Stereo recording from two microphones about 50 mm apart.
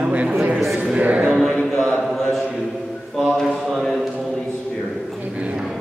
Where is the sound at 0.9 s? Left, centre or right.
Right.